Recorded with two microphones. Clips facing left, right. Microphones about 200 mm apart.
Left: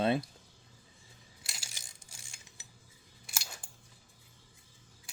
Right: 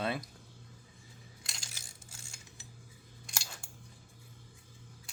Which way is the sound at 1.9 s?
15° left (ahead or behind).